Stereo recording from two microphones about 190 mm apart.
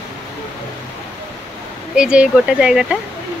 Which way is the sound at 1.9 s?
5° right (ahead or behind).